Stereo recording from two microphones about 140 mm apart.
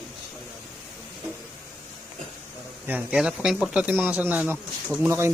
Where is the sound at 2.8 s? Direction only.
10° right (ahead or behind).